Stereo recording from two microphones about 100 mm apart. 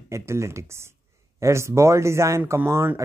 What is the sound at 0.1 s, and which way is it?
Speech, 30° right (ahead or behind).